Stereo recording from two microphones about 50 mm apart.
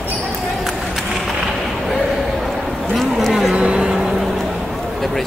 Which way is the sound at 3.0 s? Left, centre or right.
Centre.